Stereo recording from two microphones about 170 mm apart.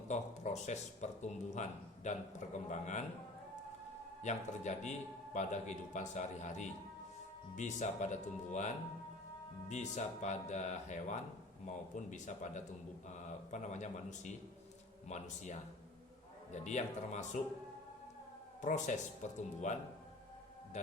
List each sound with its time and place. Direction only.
0.1 s a man's voice: 45° left (ahead or behind)
4.2 s a man's voice: 45° left (ahead or behind)
18.6 s a man's voice: 45° left (ahead or behind)